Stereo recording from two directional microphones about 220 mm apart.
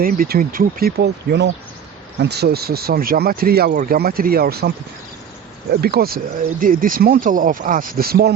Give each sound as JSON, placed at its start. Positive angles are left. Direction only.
{"t": 0.0, "sound": "speech", "side_deg": -40}
{"t": 5.8, "sound": "speech", "side_deg": -45}